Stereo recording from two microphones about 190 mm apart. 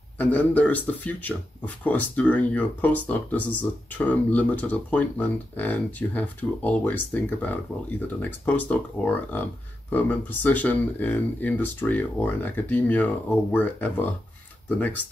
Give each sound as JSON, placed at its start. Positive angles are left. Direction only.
{"t": 0.2, "sound": "speech", "side_deg": 10}